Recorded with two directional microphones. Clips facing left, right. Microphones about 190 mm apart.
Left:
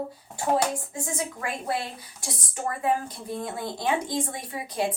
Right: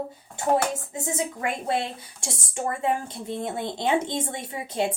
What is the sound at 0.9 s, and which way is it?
A woman's voice, 20° right (ahead or behind).